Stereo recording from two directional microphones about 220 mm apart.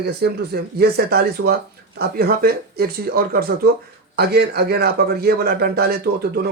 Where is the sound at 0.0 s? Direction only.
45° right (ahead or behind).